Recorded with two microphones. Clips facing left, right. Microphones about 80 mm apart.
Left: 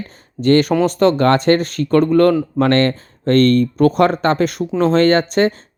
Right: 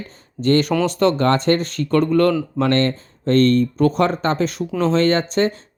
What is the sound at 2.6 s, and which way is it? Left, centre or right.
Speech, left.